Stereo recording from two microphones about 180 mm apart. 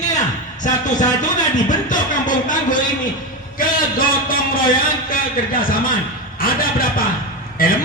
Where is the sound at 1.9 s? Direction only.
45° left (ahead or behind).